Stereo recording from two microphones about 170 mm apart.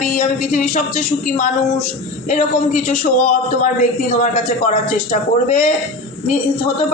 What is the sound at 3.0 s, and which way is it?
Speech, 55° left (ahead or behind).